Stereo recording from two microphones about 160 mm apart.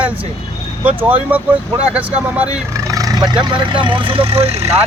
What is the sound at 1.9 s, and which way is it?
Speech, 10° right (ahead or behind).